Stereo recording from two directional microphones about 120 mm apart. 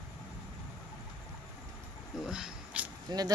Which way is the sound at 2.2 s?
5° right (ahead or behind).